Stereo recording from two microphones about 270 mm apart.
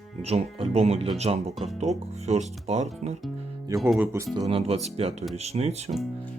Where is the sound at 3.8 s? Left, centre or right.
Centre.